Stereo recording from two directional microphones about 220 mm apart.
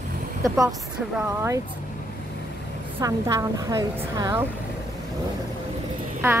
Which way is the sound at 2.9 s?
15° right (ahead or behind).